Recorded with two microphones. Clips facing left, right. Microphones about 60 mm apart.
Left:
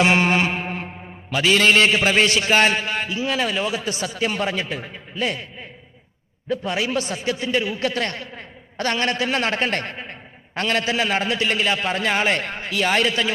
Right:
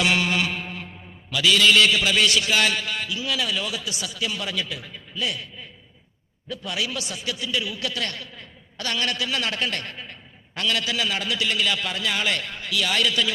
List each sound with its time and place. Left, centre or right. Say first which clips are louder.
0.0 s a man's voice: left 5 dB; left